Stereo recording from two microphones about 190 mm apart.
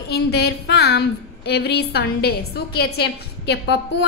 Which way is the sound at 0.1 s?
60° left (ahead or behind).